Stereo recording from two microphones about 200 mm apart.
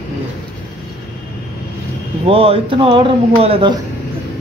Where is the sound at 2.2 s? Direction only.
30° right (ahead or behind).